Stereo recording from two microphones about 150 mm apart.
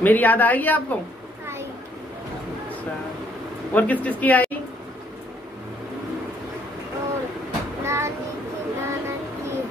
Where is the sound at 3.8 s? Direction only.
10° left (ahead or behind).